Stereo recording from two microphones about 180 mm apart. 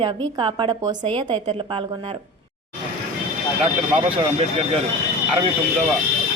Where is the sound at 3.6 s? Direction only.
30° right (ahead or behind).